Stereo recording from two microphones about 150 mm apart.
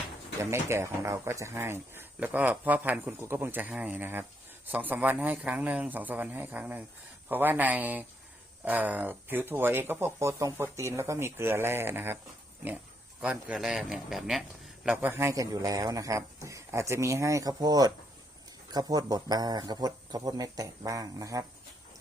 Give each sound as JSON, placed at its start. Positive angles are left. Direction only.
{"t": 0.5, "sound": "speech", "side_deg": -15}
{"t": 13.2, "sound": "a man's voice", "side_deg": -10}
{"t": 14.8, "sound": "a man's voice", "side_deg": -15}